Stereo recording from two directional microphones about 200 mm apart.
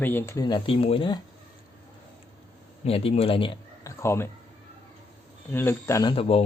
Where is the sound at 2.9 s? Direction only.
30° left (ahead or behind).